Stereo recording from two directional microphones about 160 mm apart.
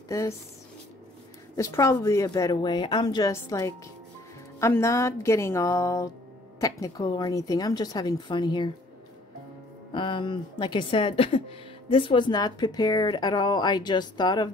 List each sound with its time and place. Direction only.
0.1 s speech: 20° left (ahead or behind)
1.6 s speech: 20° left (ahead or behind)
9.9 s speech: 30° left (ahead or behind)